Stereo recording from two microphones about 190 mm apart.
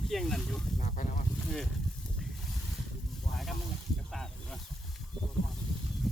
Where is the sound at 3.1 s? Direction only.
Centre (ahead or behind).